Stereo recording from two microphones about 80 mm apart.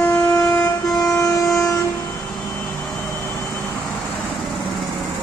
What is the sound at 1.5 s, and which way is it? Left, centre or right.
Train, centre.